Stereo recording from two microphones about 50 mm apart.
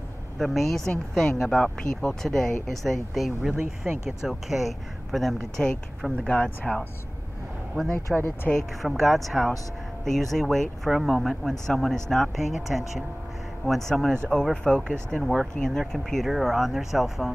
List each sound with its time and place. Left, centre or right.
0.4 s speech: centre
3.4 s speech: centre
6.2 s speech: left
8.1 s speech: centre
12.4 s speech: centre
13.7 s speech: centre